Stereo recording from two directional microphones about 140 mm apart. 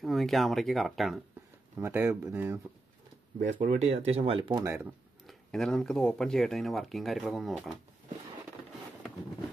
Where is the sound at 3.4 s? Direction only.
60° right (ahead or behind); by 4.6 s 40° right (ahead or behind).